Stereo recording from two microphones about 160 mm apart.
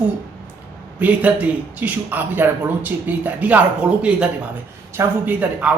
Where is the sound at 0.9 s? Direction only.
10° right (ahead or behind).